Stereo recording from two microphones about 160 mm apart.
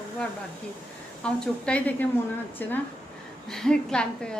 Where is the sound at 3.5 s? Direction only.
5° left (ahead or behind).